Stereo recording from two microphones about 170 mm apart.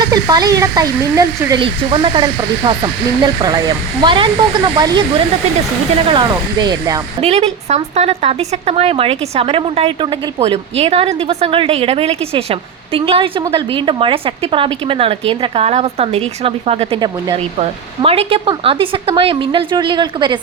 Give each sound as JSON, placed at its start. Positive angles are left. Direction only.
{"t": 0.0, "sound": "speech", "side_deg": -20}
{"t": 1.6, "sound": "speech", "side_deg": -30}
{"t": 6.1, "sound": "speech", "side_deg": -25}
{"t": 7.2, "sound": "speech", "side_deg": -40}